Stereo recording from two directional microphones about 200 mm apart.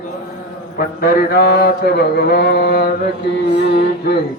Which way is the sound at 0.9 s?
50° left (ahead or behind).